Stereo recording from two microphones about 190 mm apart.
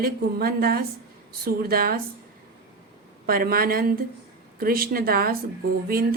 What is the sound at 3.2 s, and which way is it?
Speech, 50° right (ahead or behind).